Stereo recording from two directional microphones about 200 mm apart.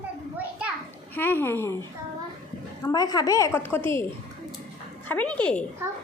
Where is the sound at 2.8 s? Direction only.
20° left (ahead or behind).